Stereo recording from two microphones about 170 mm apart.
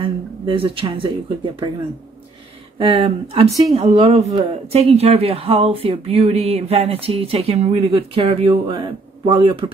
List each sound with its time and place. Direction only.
0.0 s speech: 30° right (ahead or behind)
2.8 s speech: 30° right (ahead or behind)